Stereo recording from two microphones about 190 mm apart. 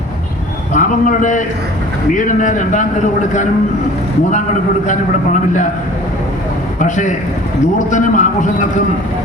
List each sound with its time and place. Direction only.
0.7 s a man's voice: 40° left (ahead or behind)
4.9 s a man's voice: 40° left (ahead or behind)
6.7 s a man's voice: 40° left (ahead or behind)